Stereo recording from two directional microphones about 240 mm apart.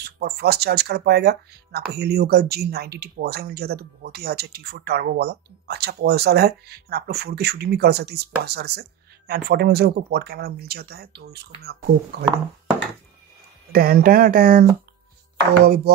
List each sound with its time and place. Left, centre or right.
0.0 s speech: right
13.7 s speech: right